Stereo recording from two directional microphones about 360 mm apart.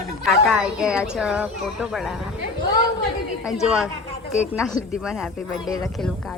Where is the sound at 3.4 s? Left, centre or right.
Centre.